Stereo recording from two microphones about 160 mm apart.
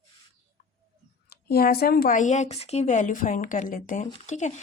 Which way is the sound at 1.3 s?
75° left (ahead or behind).